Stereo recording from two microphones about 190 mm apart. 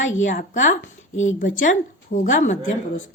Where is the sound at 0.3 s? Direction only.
40° left (ahead or behind).